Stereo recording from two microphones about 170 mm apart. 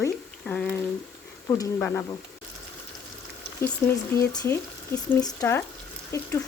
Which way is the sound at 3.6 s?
15° left (ahead or behind).